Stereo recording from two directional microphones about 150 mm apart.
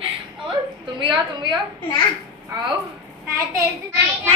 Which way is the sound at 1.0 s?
30° right (ahead or behind).